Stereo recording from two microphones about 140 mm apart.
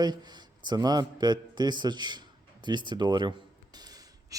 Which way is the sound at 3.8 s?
30° right (ahead or behind).